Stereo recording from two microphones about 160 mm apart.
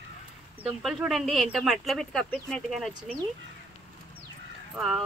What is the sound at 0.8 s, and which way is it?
Speech, centre (ahead or behind).